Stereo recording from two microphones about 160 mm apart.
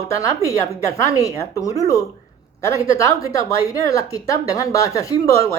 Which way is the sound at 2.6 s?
20° left (ahead or behind).